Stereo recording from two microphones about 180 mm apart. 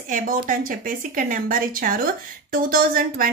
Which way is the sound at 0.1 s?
50° right (ahead or behind).